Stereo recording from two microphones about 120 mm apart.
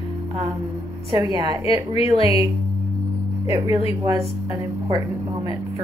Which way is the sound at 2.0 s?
50° left (ahead or behind).